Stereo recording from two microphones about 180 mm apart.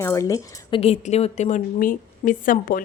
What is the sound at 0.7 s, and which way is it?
A woman's voice, 35° left (ahead or behind).